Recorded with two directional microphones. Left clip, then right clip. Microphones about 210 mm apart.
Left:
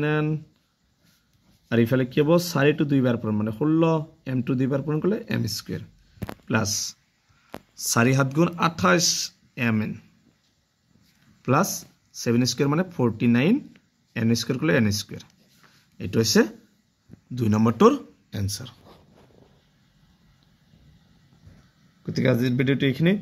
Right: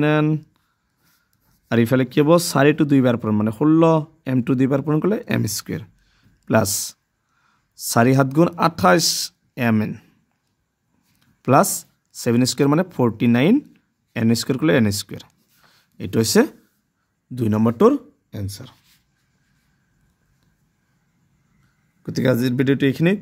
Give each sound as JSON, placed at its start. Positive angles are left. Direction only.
{"t": 0.0, "sound": "speech", "side_deg": -55}
{"t": 1.7, "sound": "speech", "side_deg": -55}
{"t": 11.4, "sound": "speech", "side_deg": -55}
{"t": 22.0, "sound": "speech", "side_deg": -55}